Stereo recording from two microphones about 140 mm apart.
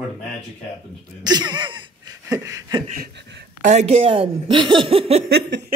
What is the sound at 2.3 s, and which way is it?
Speech, 25° right (ahead or behind).